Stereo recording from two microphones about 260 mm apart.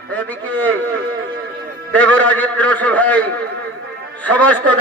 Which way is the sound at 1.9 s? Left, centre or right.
Centre.